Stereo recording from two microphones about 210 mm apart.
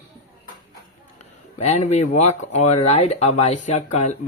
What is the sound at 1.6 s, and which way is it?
Speech, 30° left (ahead or behind).